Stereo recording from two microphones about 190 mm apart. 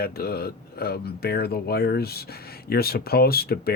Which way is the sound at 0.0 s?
55° left (ahead or behind).